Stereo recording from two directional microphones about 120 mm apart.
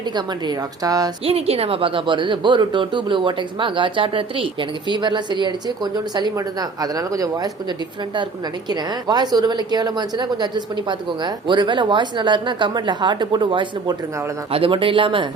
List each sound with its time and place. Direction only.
0.2 s a woman's voice: 35° right (ahead or behind)
1.2 s a woman's voice: 55° right (ahead or behind); by 7.5 s 30° right (ahead or behind)
8.7 s a woman's voice: 35° right (ahead or behind)